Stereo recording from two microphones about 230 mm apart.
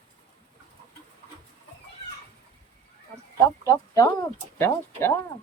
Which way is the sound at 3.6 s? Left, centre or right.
Centre.